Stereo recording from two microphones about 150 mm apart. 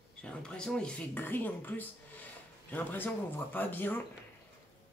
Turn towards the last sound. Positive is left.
turn(degrees=15)  # may be behind; listen again after turning